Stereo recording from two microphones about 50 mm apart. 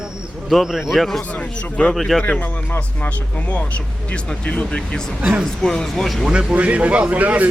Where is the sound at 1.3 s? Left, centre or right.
Left.